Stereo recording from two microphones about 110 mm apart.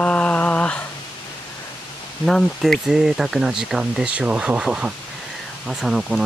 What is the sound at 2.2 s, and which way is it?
Speech, 5° left (ahead or behind).